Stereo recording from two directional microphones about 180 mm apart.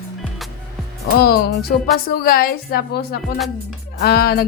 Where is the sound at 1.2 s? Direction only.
60° left (ahead or behind).